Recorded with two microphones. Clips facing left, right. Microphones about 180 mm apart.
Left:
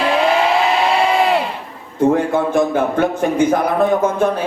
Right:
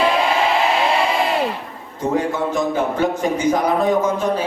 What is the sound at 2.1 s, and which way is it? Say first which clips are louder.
Speech: left 4 dB; 55° left (ahead or behind).